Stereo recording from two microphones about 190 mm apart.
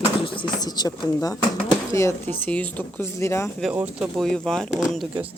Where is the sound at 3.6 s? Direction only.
5° right (ahead or behind).